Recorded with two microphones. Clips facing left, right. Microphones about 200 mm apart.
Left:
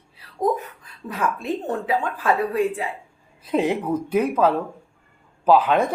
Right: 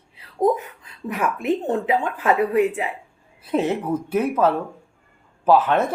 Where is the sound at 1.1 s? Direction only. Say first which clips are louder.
Right 3 dB; 20° right (ahead or behind).